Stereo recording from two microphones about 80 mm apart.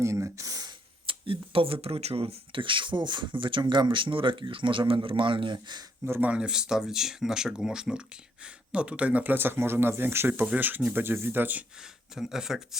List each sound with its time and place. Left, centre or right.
0.0 s a sound: right
0.7 s a sound: right
1.9 s speech: right
6.1 s speech: right
10.4 s speech: centre
11.8 s speech: centre